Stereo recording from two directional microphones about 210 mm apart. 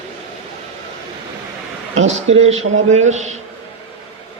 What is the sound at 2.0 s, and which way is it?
A man's voice, 35° right (ahead or behind).